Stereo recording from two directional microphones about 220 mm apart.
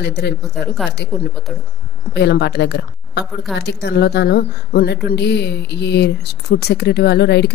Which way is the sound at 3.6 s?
50° left (ahead or behind).